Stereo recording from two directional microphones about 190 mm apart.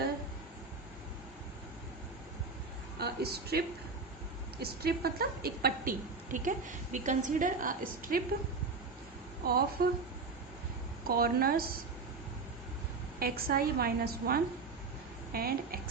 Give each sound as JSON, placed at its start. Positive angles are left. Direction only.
{"t": 3.0, "sound": "a woman's voice", "side_deg": -55}
{"t": 9.5, "sound": "a woman's voice", "side_deg": -55}
{"t": 11.0, "sound": "a woman's voice", "side_deg": -50}
{"t": 13.1, "sound": "a woman's voice", "side_deg": -50}